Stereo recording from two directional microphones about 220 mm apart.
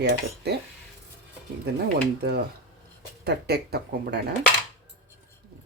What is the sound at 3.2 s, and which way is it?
Cutlery, 45° right (ahead or behind).